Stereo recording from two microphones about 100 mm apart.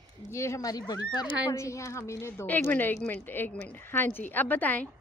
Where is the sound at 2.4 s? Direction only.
15° left (ahead or behind).